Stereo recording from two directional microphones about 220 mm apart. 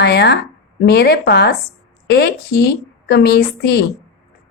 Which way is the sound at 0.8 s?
45° left (ahead or behind).